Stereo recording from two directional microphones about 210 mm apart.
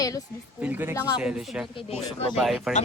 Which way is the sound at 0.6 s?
10° right (ahead or behind).